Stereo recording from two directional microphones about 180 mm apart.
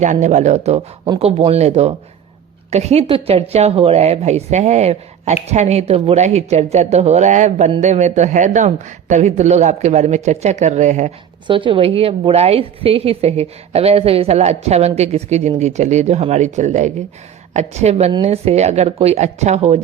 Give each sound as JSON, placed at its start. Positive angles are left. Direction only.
{"t": 0.0, "sound": "a woman's voice", "side_deg": -40}
{"t": 11.4, "sound": "a woman's voice", "side_deg": -30}